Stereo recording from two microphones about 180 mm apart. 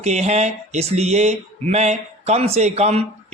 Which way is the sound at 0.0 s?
40° right (ahead or behind).